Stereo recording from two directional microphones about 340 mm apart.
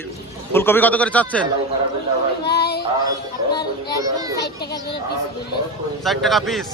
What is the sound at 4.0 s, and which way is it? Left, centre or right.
Children playing, centre.